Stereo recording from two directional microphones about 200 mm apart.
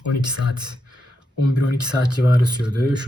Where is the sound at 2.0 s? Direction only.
20° right (ahead or behind).